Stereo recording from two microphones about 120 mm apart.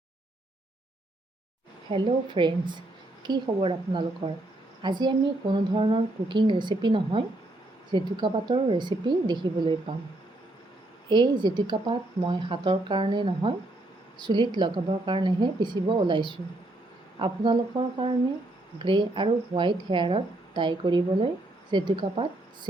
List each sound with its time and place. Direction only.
1.9 s a woman's voice: 45° right (ahead or behind)
4.8 s speech: 40° right (ahead or behind)
11.1 s a woman's voice: 40° right (ahead or behind)